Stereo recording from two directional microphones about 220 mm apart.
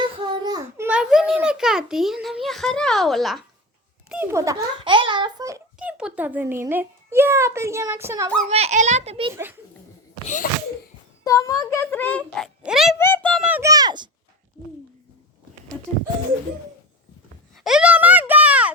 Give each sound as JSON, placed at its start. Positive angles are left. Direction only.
{"t": 0.2, "sound": "a sound", "side_deg": -20}
{"t": 0.9, "sound": "a child's voice", "side_deg": -5}
{"t": 4.1, "sound": "a child's voice", "side_deg": -10}
{"t": 8.4, "sound": "a child's voice", "side_deg": -30}
{"t": 10.4, "sound": "a sound", "side_deg": 40}
{"t": 11.2, "sound": "a child's voice", "side_deg": 15}
{"t": 13.0, "sound": "a child's voice", "side_deg": 10}
{"t": 13.5, "sound": "a child's voice", "side_deg": -15}
{"t": 17.6, "sound": "a sound", "side_deg": -5}